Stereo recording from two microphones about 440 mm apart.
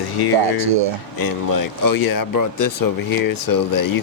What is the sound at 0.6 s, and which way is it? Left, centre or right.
Speech, right.